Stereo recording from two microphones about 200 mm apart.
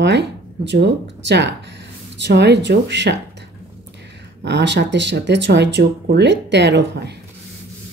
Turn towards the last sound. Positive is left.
turn(degrees=-55)  # may be behind; listen again after turning